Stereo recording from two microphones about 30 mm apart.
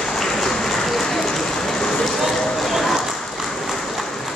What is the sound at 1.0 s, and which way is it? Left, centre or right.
Run, centre.